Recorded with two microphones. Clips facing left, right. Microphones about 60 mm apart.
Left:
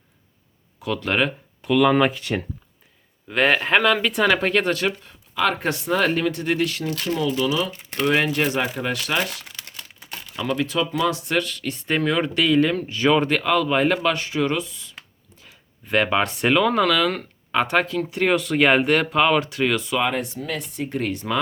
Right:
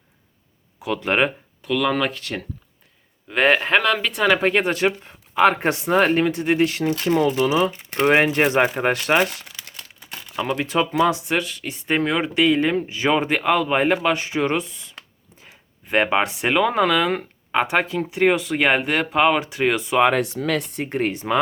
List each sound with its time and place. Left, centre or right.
0.8 s speech: centre
1.6 s speech: centre
3.2 s speech: centre; by 9.4 s right
10.7 s speech: right
11.1 s speech: centre
16.0 s speech: right
16.2 s speech: centre
20.1 s speech: right
20.7 s speech: right